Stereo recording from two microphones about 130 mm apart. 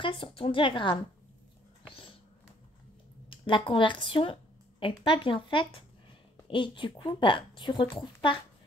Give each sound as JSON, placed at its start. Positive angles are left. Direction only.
{"t": 0.0, "sound": "speech", "side_deg": 45}
{"t": 1.9, "sound": "a sound", "side_deg": 45}
{"t": 3.3, "sound": "a woman's voice", "side_deg": 40}